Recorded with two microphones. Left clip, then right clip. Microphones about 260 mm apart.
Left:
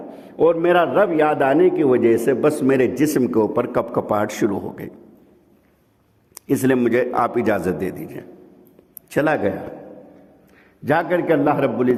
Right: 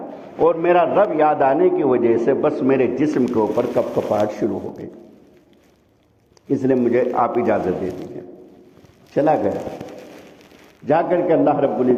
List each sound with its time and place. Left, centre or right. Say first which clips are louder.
0.3 s a man's voice: even; left
6.5 s a man's voice: even; left
9.1 s a man's voice: right 2 dB; left
10.8 s a man's voice: right 1 dB; left